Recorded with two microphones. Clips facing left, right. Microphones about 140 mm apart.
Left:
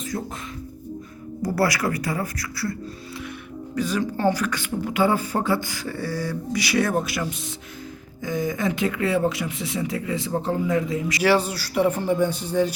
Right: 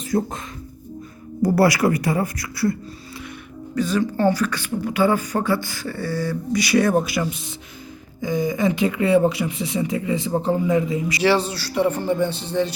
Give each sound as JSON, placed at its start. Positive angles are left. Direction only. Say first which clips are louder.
{"t": 0.1, "sound": "speech", "louder": "right 10 dB", "side_deg": -35}
{"t": 1.4, "sound": "speech", "louder": "right 6 dB", "side_deg": -25}
{"t": 3.8, "sound": "speech", "louder": "right 4 dB", "side_deg": 10}